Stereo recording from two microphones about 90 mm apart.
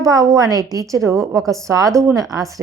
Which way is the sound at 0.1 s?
40° right (ahead or behind).